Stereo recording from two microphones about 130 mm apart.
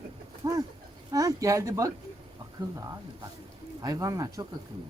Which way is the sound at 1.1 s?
25° right (ahead or behind).